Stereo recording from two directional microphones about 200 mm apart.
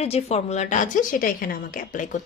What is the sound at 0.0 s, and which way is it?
Speech, 30° left (ahead or behind).